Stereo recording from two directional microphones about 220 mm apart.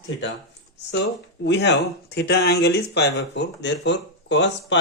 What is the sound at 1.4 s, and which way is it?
Speech, 50° left (ahead or behind).